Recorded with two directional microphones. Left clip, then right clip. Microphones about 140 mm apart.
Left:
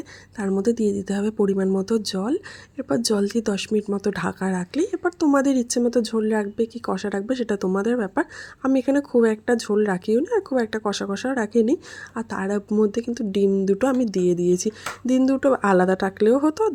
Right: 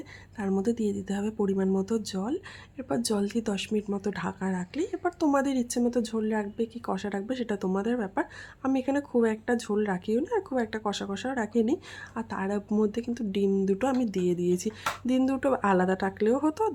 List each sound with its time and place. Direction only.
0.3 s a woman's voice: 35° left (ahead or behind)
12.6 s speech: 20° left (ahead or behind)
12.9 s a woman's voice: 35° left (ahead or behind)